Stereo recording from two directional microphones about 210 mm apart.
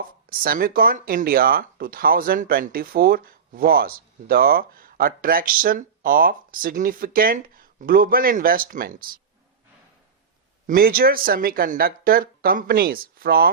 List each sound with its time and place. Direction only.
0.0 s speech: 45° right (ahead or behind)
10.7 s speech: 45° right (ahead or behind)